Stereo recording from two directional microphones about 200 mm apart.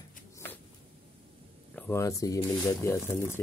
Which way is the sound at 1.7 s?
10° left (ahead or behind).